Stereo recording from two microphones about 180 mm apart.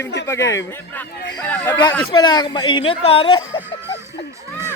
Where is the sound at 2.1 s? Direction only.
25° left (ahead or behind).